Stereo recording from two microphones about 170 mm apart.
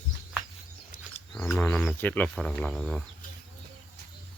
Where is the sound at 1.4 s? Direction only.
10° left (ahead or behind).